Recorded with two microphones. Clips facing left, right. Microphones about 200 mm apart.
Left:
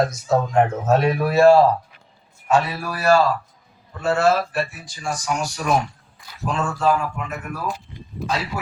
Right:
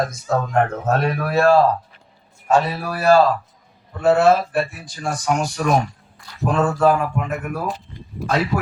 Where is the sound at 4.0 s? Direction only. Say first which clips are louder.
Right 4 dB; 60° right (ahead or behind).